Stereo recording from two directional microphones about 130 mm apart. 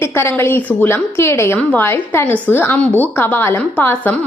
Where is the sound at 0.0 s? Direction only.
20° left (ahead or behind).